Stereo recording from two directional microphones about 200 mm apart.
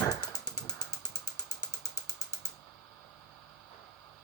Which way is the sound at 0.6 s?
20° left (ahead or behind).